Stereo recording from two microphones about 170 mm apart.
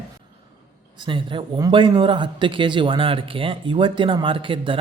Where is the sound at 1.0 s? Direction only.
30° right (ahead or behind).